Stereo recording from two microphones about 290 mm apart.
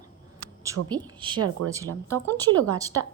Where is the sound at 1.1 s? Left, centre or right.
Centre.